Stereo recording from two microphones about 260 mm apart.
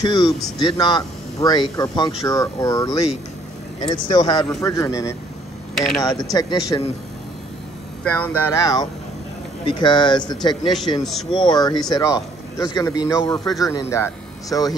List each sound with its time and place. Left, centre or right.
0.0 s speech: centre
5.8 s speech: centre
6.0 s speech: centre
8.0 s speech: centre